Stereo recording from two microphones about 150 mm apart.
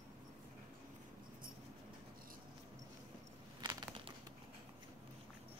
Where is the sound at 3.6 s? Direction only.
40° right (ahead or behind).